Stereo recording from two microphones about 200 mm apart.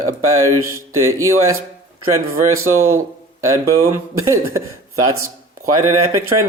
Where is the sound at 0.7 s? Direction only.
15° right (ahead or behind).